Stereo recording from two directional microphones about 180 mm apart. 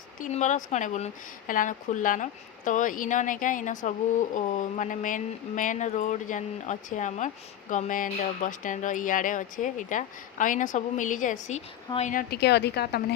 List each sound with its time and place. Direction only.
0.2 s speech: 40° left (ahead or behind)
12.3 s a woman's voice: 70° left (ahead or behind)